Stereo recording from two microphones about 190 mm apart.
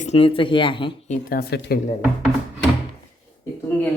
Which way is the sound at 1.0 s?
40° left (ahead or behind).